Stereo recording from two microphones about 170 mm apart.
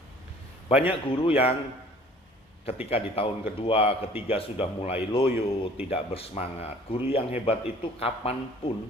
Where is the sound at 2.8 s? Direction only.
35° left (ahead or behind).